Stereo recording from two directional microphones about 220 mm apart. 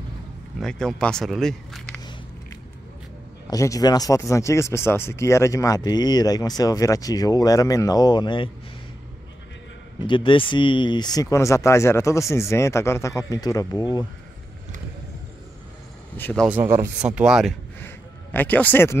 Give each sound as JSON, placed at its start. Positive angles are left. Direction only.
{"t": 0.6, "sound": "speech", "side_deg": 5}
{"t": 3.4, "sound": "speech", "side_deg": 15}
{"t": 10.0, "sound": "speech", "side_deg": 20}
{"t": 16.2, "sound": "speech", "side_deg": 10}
{"t": 16.4, "sound": "speech", "side_deg": -10}
{"t": 17.7, "sound": "a sound", "side_deg": 10}